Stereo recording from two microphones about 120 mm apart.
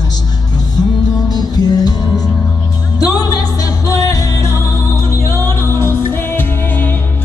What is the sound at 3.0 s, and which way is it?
Music, 30° left (ahead or behind).